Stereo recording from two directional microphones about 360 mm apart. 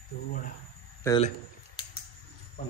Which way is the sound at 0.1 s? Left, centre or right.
Left.